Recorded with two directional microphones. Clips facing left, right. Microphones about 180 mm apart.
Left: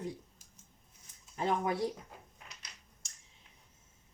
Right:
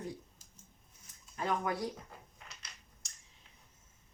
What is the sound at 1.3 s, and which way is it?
Speech, 25° left (ahead or behind).